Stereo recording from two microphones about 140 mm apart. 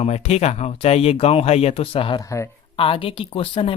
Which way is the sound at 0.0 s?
50° left (ahead or behind).